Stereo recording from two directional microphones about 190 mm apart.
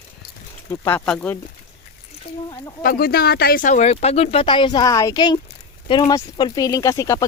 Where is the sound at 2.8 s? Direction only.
50° left (ahead or behind).